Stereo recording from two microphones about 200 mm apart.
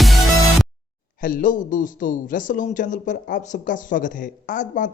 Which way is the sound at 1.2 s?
45° left (ahead or behind).